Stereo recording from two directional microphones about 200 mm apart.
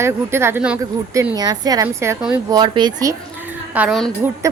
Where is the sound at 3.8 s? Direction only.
Centre (ahead or behind).